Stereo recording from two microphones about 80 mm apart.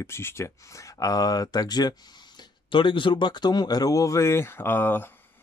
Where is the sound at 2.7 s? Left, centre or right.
Left.